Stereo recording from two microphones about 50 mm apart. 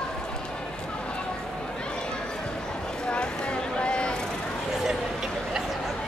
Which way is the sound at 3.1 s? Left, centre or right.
Left.